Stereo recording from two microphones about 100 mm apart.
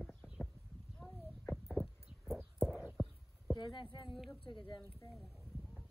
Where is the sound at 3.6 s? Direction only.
50° left (ahead or behind).